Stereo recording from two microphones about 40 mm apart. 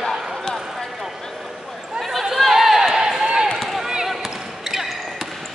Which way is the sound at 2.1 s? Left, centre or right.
Centre.